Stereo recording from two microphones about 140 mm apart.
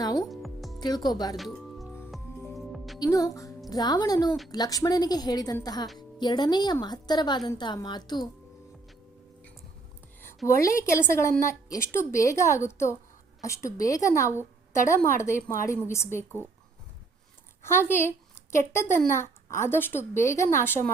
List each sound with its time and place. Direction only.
0.0 s speech: 25° left (ahead or behind)
0.3 s music: centre (ahead or behind)
0.8 s a woman's voice: 30° left (ahead or behind)
1.4 s music: centre (ahead or behind)
3.0 s a woman's voice: 25° left (ahead or behind)
10.2 s a sound: 20° left (ahead or behind)
11.1 s a woman's voice: 20° left (ahead or behind)
17.6 s a woman's voice: 15° left (ahead or behind)